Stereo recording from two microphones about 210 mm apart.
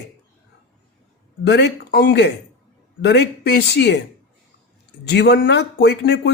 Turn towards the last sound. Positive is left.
turn(degrees=50)  # may be behind; listen again after turning